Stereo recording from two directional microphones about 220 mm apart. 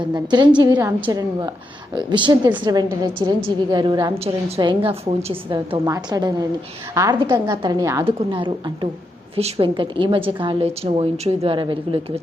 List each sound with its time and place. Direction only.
0.0 s a woman's voice: 20° right (ahead or behind)